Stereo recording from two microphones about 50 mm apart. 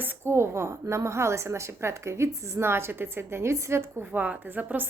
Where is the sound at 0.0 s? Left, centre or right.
Right.